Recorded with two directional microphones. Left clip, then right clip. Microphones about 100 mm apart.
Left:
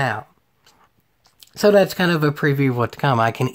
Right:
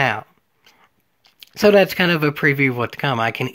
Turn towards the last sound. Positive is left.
turn(degrees=0)  # may be behind; listen again after turning